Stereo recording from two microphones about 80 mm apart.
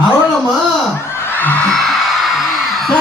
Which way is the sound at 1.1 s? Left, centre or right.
Left.